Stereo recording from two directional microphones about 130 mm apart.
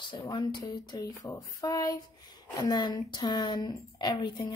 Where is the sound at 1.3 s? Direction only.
30° left (ahead or behind).